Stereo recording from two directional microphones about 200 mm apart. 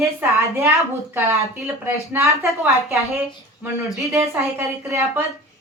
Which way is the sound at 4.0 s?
15° right (ahead or behind).